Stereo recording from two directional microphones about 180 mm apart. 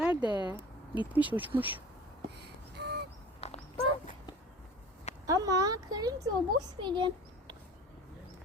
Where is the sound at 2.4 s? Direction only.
65° right (ahead or behind).